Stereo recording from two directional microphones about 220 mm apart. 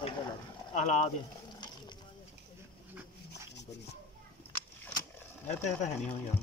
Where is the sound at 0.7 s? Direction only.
35° left (ahead or behind).